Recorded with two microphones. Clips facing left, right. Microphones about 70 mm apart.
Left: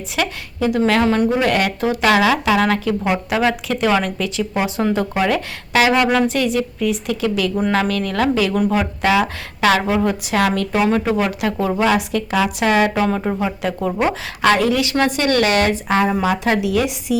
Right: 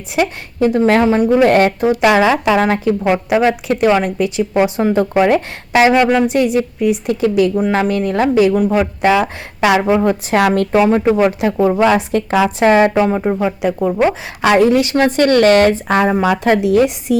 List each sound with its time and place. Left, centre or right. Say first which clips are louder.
0.6 s speech: right 4 dB; right
1.5 s a woman's voice: right 7 dB; right
1.8 s a woman's voice: right 4 dB; centre
2.1 s speech: right 3 dB; right
5.9 s speech: right 4 dB; centre
6.2 s speech: right 4 dB; right
8.5 s a woman's voice: right 4 dB; centre
9.8 s a woman's voice: right 5 dB; right
10.8 s speech: right 5 dB; right
11.9 s a woman's voice: right 4 dB; right; by 14.6 s centre
14.6 s a woman's voice: right 5 dB; right